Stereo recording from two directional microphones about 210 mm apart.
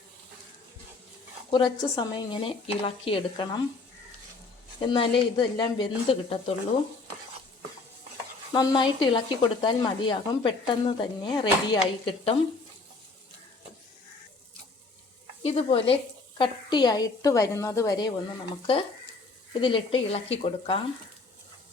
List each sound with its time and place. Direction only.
1.5 s speech: 20° left (ahead or behind)
4.8 s speech: 25° left (ahead or behind)
8.5 s speech: 20° left (ahead or behind)
15.4 s a woman's voice: 30° left (ahead or behind)